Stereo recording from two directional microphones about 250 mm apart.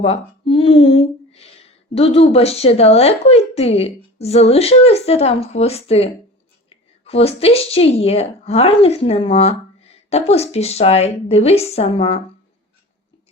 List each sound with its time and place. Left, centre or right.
0.0 s speech: left